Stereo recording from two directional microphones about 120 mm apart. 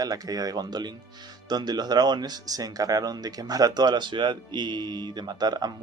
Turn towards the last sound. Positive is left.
turn(degrees=-35)  # may be behind; listen again after turning